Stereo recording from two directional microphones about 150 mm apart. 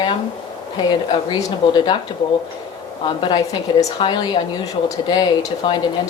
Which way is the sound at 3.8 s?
35° left (ahead or behind).